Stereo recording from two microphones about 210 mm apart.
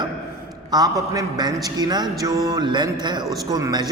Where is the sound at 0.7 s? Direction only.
20° right (ahead or behind).